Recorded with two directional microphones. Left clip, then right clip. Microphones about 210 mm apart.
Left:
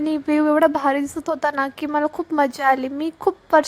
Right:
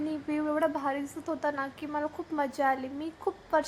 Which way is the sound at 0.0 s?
45° left (ahead or behind).